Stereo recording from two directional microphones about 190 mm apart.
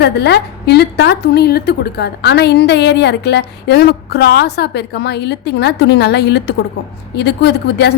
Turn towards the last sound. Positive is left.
turn(degrees=60)  # may be behind; listen again after turning